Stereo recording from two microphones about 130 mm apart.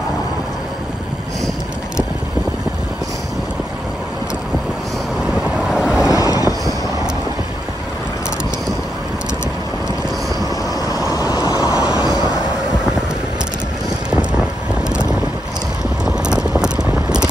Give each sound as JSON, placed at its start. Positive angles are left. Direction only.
{"t": 5.3, "sound": "vehicle", "side_deg": -5}
{"t": 6.0, "sound": "boat", "side_deg": 25}
{"t": 10.9, "sound": "vehicle", "side_deg": 30}
{"t": 14.9, "sound": "vehicle", "side_deg": -5}